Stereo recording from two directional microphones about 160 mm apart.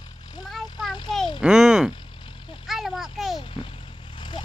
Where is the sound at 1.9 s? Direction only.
30° left (ahead or behind).